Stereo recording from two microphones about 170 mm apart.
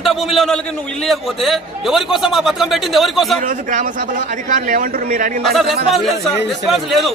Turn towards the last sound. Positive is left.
turn(degrees=0)  # may be behind; listen again after turning